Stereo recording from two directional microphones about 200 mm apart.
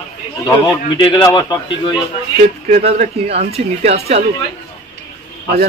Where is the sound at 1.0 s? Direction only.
25° left (ahead or behind).